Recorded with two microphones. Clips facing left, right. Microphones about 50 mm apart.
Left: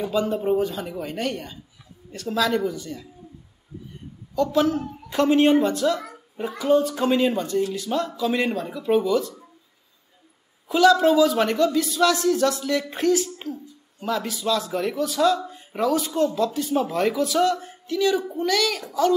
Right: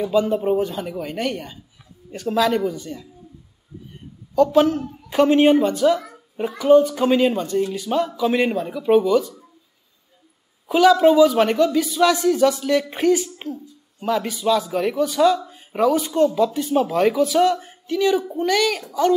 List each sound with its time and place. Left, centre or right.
0.2 s speech: centre
4.4 s a child's voice: right
6.8 s speech: centre
10.7 s speech: centre
12.4 s speech: right
12.9 s speech: centre